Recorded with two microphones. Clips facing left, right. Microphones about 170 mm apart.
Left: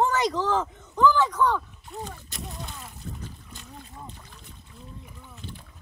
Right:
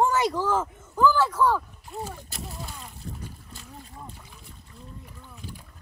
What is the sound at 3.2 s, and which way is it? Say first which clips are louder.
Boat: even; 5° right (ahead or behind).